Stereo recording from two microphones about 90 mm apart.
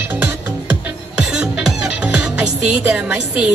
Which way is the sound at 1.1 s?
5° right (ahead or behind).